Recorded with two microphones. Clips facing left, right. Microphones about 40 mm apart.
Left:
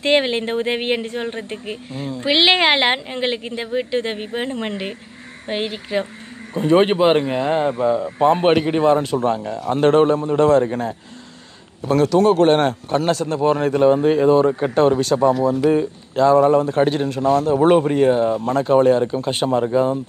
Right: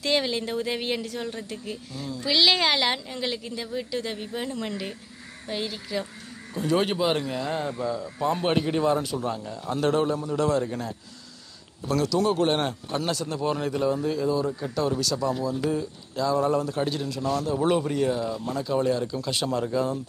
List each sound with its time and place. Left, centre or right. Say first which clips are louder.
0.0 s a woman's voice: left 8 dB; left
15.5 s speech: left 10 dB; left
15.8 s a woman's voice: left 11 dB; left